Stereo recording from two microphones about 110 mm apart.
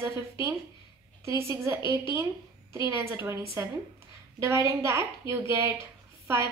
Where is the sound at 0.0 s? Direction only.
25° right (ahead or behind).